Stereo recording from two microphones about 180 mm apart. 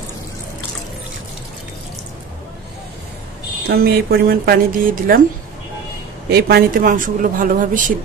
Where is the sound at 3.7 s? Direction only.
60° right (ahead or behind).